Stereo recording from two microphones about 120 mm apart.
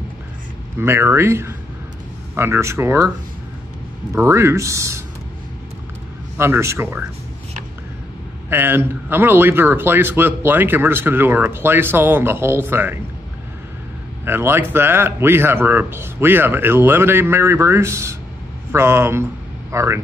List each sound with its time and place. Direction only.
0.7 s speech: 20° right (ahead or behind)
4.1 s speech: 20° right (ahead or behind)
6.3 s speech: 20° right (ahead or behind)
8.5 s a man's voice: 20° right (ahead or behind)
14.2 s speech: 20° right (ahead or behind)